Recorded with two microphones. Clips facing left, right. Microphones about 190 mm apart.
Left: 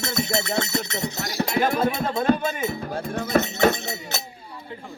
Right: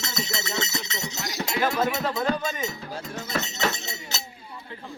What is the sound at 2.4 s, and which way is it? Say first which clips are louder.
Speech: left 4 dB; 55° left (ahead or behind).